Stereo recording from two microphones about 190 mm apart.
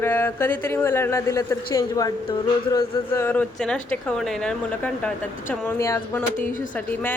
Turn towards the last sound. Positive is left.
turn(degrees=15)  # may be behind; listen again after turning